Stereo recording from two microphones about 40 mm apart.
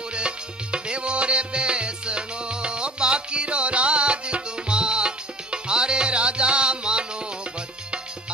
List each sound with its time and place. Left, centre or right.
0.1 s music: right